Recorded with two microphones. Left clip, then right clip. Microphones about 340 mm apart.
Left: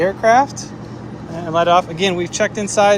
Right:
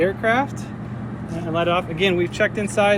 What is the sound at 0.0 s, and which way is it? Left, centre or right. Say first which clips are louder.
Speech: left 6 dB; left.